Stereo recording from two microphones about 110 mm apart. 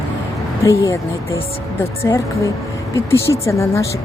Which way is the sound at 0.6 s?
30° left (ahead or behind).